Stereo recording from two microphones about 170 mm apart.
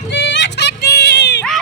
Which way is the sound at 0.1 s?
90° left.